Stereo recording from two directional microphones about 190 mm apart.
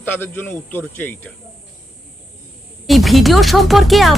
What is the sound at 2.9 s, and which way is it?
Speech, centre (ahead or behind).